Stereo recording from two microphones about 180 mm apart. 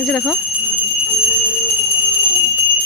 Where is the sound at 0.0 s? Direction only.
5° left (ahead or behind).